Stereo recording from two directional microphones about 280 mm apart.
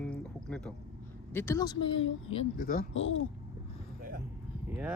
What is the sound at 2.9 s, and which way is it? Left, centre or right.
Speech, left.